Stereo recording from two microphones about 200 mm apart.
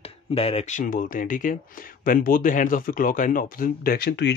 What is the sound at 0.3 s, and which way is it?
Speech, 30° left (ahead or behind).